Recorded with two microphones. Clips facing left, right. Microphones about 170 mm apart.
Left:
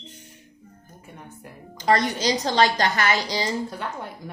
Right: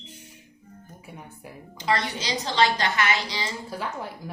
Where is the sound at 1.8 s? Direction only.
45° left (ahead or behind).